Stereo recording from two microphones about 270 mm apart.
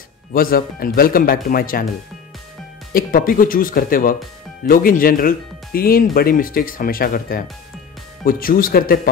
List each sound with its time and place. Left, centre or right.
0.3 s speech: left
2.9 s speech: left